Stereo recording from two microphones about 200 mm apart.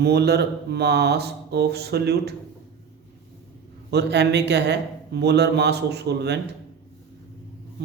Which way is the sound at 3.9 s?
55° right (ahead or behind).